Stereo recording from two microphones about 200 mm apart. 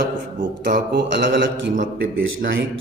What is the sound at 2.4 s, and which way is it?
Speech, 50° right (ahead or behind).